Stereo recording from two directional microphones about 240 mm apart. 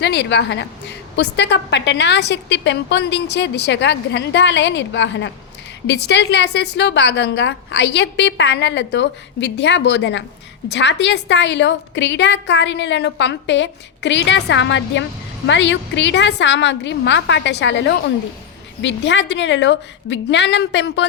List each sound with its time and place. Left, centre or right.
0.0 s a woman's voice: left